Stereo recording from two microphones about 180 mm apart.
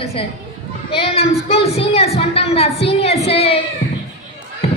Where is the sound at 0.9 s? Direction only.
35° left (ahead or behind).